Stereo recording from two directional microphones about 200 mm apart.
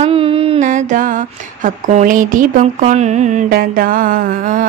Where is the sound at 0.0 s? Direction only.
25° right (ahead or behind).